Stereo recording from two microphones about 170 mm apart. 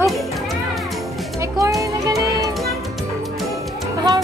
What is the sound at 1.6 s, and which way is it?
Music, 20° right (ahead or behind).